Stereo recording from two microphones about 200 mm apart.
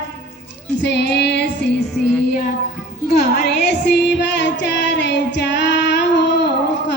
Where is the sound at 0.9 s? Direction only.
60° left (ahead or behind).